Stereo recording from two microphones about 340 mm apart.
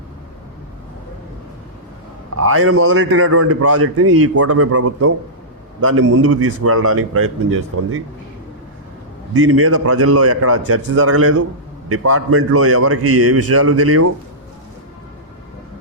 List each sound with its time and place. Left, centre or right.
2.3 s a man's voice: right
9.3 s a man's voice: right